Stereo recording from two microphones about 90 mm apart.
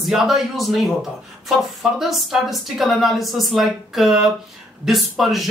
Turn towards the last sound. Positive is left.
turn(degrees=0)  # may be behind; listen again after turning